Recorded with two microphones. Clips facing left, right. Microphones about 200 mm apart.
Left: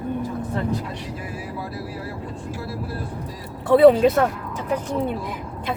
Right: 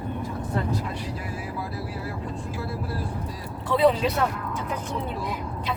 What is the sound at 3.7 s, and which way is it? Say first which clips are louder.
Speech: left 8 dB; 55° left (ahead or behind).